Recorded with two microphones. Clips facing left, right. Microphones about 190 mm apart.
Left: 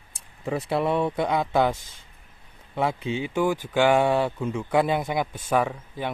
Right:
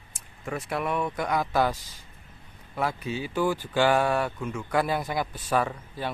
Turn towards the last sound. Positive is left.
turn(degrees=15)  # may be behind; listen again after turning